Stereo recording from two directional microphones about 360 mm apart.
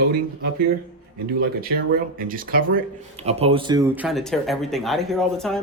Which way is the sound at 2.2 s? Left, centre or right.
Right.